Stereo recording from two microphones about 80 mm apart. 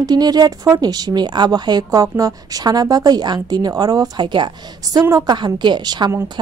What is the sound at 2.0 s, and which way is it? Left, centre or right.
A woman's voice, right.